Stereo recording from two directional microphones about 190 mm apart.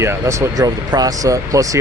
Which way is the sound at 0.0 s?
15° right (ahead or behind).